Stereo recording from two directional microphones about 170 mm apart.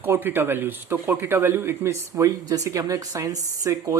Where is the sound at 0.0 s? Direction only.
15° right (ahead or behind).